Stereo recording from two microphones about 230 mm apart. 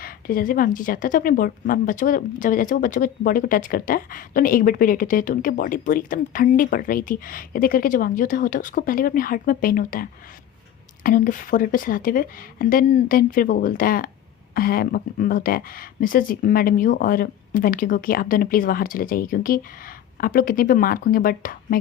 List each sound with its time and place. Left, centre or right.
0.0 s speech: left